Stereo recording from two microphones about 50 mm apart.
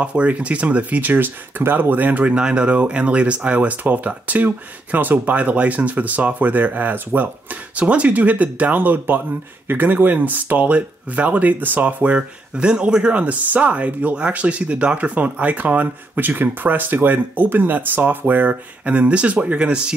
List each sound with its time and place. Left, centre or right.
0.0 s speech: right
12.0 s speech: right